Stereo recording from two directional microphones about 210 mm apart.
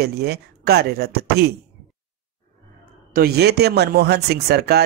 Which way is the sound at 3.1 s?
50° right (ahead or behind).